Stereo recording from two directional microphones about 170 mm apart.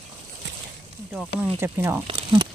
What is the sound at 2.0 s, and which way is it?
Speech, 30° right (ahead or behind).